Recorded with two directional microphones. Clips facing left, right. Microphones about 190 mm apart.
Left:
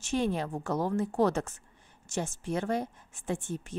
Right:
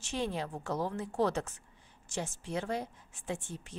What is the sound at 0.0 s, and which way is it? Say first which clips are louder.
A woman's voice: left 5 dB; 50° left (ahead or behind).